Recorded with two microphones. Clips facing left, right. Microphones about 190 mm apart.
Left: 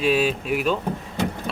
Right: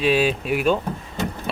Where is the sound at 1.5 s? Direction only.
5° right (ahead or behind).